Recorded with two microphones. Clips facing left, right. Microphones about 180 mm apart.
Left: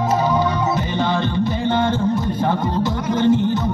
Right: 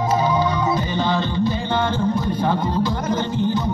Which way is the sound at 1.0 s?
60° left (ahead or behind).